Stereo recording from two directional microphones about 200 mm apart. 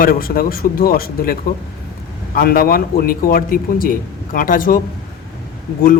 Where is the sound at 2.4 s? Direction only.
45° left (ahead or behind).